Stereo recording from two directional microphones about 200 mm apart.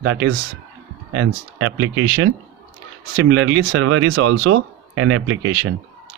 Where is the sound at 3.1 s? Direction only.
75° right (ahead or behind); by 5.5 s 90° right.